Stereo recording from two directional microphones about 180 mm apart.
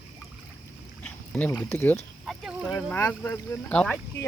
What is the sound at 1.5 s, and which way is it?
Speech, 10° left (ahead or behind).